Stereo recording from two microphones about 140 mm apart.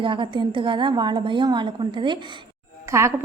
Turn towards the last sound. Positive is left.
turn(degrees=-20)  # may be behind; listen again after turning